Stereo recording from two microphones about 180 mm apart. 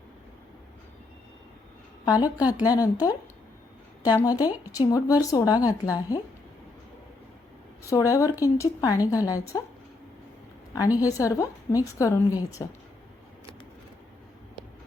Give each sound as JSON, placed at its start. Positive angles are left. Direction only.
{"t": 2.6, "sound": "speech", "side_deg": 20}
{"t": 7.9, "sound": "speech", "side_deg": 20}
{"t": 10.8, "sound": "a woman's voice", "side_deg": 20}